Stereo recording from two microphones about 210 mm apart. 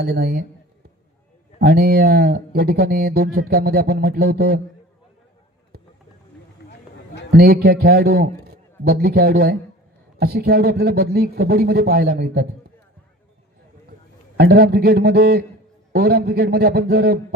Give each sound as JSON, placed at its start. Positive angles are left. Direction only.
{"t": 0.0, "sound": "speech", "side_deg": -50}
{"t": 1.5, "sound": "speech", "side_deg": -50}
{"t": 7.3, "sound": "speech", "side_deg": -50}
{"t": 14.3, "sound": "speech", "side_deg": -50}